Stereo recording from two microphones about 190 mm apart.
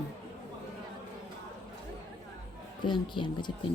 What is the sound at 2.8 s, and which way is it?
Speech, 25° left (ahead or behind).